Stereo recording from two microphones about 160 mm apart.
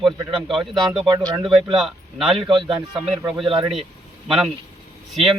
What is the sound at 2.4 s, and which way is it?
Speech, 30° right (ahead or behind).